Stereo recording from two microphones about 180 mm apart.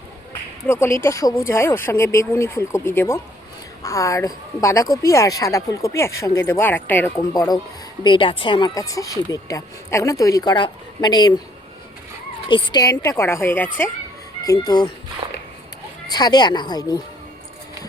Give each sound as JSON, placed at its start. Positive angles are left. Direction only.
{"t": 0.7, "sound": "a woman's voice", "side_deg": 15}
{"t": 12.5, "sound": "a woman's voice", "side_deg": 25}
{"t": 15.2, "sound": "a sound", "side_deg": -25}
{"t": 16.0, "sound": "speech", "side_deg": 20}